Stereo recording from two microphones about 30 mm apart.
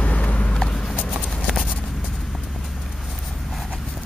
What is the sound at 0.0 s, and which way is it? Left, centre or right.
Vehicle, left.